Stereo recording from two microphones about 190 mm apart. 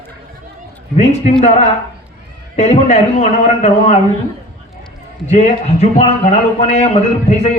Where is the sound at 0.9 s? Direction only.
35° left (ahead or behind).